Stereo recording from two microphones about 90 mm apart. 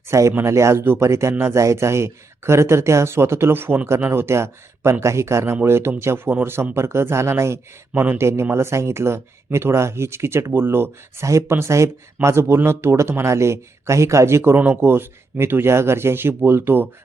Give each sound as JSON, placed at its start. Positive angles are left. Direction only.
{"t": 0.1, "sound": "speech", "side_deg": -30}